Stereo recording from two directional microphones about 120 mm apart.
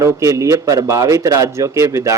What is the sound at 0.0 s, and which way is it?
A man's voice, 25° right (ahead or behind).